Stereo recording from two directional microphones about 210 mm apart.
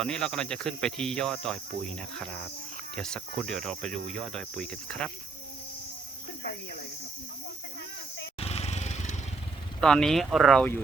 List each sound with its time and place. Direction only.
0.0 s speech: 5° left (ahead or behind)
6.4 s speech: 50° left (ahead or behind)
8.4 s vehicle: 30° left (ahead or behind)
9.8 s speech: 5° left (ahead or behind)